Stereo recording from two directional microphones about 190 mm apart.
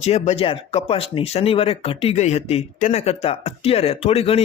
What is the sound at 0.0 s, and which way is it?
Speech, 35° left (ahead or behind).